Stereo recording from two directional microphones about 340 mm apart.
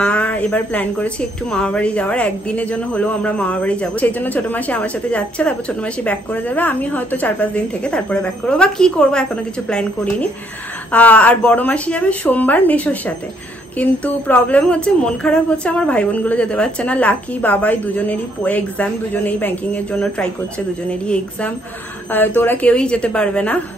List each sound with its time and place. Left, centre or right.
0.0 s speech: centre
22.1 s speech: centre